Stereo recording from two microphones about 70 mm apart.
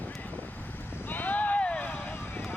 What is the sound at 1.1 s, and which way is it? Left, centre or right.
Vehicle, left.